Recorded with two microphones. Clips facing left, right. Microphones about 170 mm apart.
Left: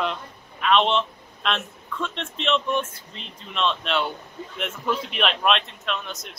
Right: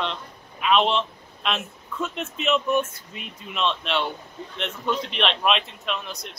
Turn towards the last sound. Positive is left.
turn(degrees=0)  # may be behind; listen again after turning